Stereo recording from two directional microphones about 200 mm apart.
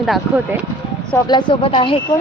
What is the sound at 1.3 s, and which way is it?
Speech, 25° left (ahead or behind).